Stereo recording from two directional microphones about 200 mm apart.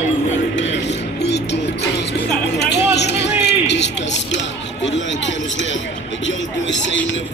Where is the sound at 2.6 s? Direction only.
60° left (ahead or behind).